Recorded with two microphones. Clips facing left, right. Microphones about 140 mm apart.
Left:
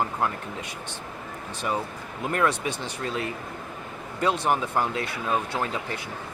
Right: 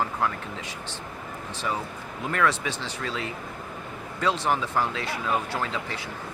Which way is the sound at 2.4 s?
15° left (ahead or behind).